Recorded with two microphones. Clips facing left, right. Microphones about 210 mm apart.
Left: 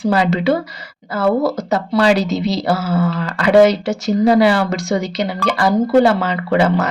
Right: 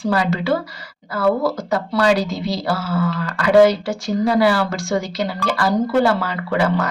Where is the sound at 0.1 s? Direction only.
20° left (ahead or behind).